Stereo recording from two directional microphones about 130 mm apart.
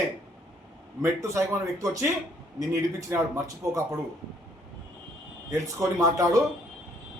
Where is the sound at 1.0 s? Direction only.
25° right (ahead or behind).